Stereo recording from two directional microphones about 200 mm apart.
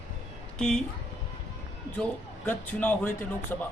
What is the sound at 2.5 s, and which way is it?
Speech, 10° left (ahead or behind).